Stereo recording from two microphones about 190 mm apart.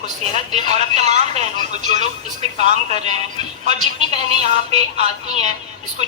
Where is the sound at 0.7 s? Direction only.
35° right (ahead or behind).